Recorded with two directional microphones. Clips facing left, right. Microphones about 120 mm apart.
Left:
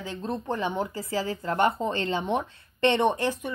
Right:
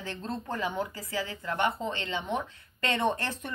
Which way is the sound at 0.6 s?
25° left (ahead or behind).